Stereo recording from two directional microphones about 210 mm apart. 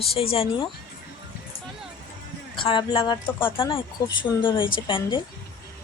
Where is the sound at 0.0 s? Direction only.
25° left (ahead or behind).